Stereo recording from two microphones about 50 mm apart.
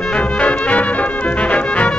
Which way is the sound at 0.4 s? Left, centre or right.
Left.